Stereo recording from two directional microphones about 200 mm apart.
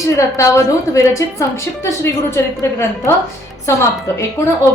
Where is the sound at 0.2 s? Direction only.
15° left (ahead or behind).